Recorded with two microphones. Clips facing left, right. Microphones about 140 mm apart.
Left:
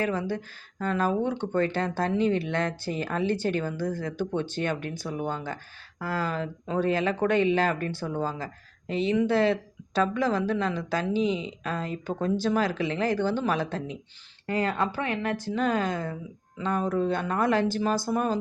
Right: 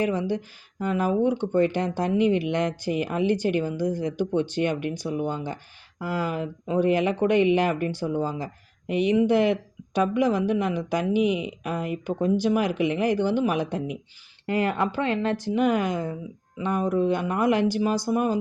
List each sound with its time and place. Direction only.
0.0 s speech: 15° right (ahead or behind)